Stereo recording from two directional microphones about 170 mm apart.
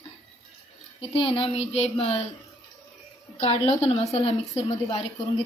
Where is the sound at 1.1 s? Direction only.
30° left (ahead or behind).